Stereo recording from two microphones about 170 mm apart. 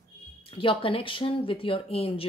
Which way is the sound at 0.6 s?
30° left (ahead or behind).